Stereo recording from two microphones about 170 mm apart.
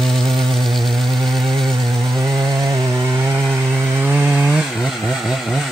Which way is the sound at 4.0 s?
10° right (ahead or behind).